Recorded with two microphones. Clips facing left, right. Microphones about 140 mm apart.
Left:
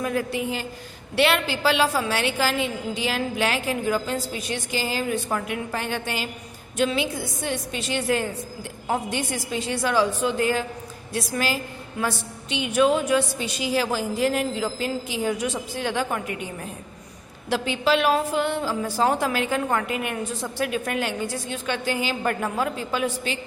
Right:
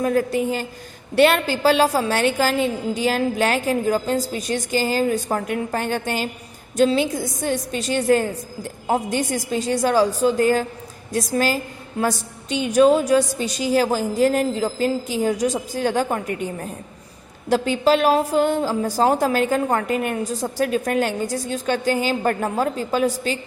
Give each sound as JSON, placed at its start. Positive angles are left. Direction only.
{"t": 0.0, "sound": "a woman's voice", "side_deg": -40}